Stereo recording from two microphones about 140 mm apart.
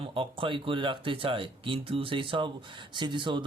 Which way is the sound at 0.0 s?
40° right (ahead or behind).